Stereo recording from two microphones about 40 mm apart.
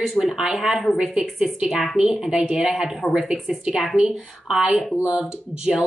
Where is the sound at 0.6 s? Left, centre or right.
Centre.